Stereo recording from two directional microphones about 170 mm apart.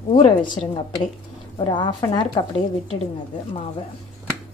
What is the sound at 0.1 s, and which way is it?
Speech, 30° left (ahead or behind).